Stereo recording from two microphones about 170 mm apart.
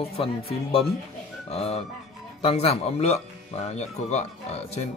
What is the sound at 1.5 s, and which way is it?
Speech, 35° left (ahead or behind).